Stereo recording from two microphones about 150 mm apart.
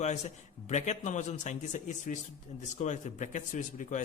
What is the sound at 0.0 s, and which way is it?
A man's voice, 50° left (ahead or behind).